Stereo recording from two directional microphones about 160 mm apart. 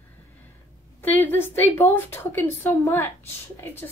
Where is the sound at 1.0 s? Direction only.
10° left (ahead or behind).